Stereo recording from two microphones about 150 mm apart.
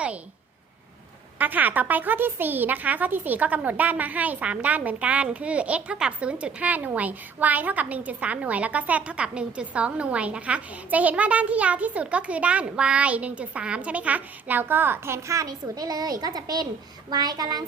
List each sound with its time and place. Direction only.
1.4 s a woman's voice: 10° right (ahead or behind); by 17.6 s 25° right (ahead or behind)